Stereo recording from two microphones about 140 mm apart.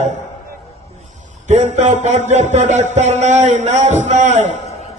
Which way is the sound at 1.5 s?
55° right (ahead or behind).